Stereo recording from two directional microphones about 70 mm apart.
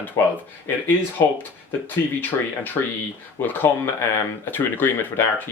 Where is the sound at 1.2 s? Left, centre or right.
Left.